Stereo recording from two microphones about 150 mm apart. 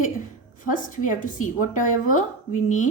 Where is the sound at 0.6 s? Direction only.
65° left (ahead or behind).